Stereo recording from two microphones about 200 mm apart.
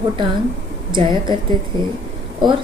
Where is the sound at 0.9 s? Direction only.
25° right (ahead or behind).